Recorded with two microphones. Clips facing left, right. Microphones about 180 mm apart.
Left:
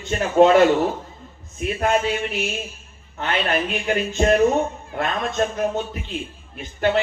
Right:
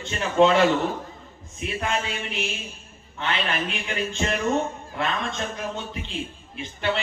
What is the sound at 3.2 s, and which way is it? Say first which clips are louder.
Speech: left 5 dB; 45° left (ahead or behind).